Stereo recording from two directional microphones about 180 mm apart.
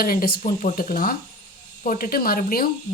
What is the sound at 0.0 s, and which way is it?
Speech, 55° left (ahead or behind).